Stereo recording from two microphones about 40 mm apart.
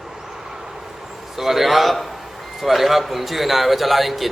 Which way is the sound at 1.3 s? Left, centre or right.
Centre.